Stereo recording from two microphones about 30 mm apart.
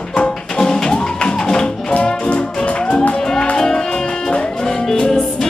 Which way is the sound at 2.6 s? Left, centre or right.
Left.